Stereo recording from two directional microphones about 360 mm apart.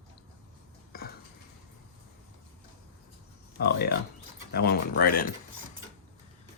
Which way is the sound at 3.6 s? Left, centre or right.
Left.